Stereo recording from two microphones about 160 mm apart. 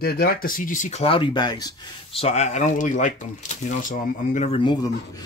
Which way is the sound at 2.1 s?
40° left (ahead or behind).